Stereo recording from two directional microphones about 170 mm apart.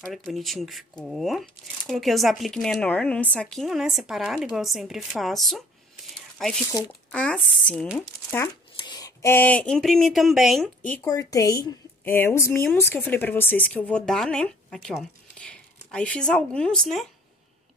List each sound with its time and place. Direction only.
0.1 s speech: centre (ahead or behind)
8.7 s speech: 25° left (ahead or behind); by 10.7 s centre (ahead or behind)
11.0 s speech: 20° left (ahead or behind); by 17.1 s centre (ahead or behind)